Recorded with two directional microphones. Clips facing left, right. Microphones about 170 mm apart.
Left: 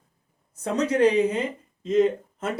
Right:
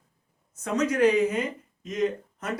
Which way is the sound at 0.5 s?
30° left (ahead or behind).